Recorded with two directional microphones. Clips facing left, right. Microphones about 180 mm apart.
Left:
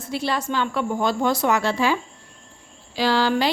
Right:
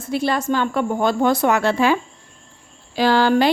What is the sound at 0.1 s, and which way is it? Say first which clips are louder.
Speech: right 5 dB; 50° right (ahead or behind).